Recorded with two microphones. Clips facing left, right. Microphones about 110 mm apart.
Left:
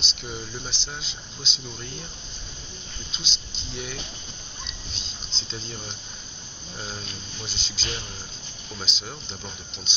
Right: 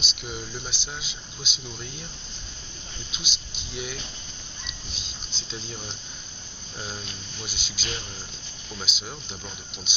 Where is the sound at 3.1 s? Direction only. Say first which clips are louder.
Left 1 dB; 5° right (ahead or behind).